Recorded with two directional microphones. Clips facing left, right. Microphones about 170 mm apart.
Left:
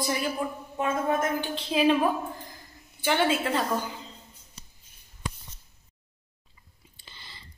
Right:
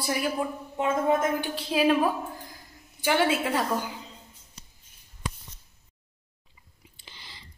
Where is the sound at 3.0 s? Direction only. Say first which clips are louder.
Right 1 dB; 10° right (ahead or behind).